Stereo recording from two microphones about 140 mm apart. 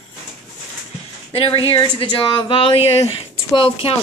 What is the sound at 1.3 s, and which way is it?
Speech, 40° left (ahead or behind).